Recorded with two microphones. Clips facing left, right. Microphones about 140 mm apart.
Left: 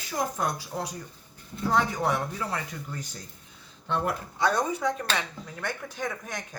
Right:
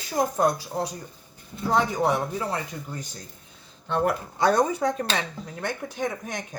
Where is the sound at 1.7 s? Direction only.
20° right (ahead or behind).